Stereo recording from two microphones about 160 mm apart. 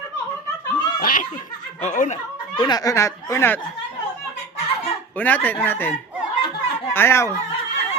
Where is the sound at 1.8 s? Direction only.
45° left (ahead or behind).